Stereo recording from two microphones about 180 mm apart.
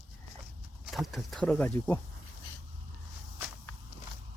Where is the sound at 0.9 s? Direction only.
Centre (ahead or behind).